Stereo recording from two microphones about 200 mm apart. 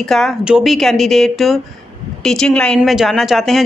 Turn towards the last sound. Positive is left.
turn(degrees=0)  # may be behind; listen again after turning